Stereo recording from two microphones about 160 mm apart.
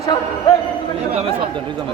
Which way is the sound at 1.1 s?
40° right (ahead or behind).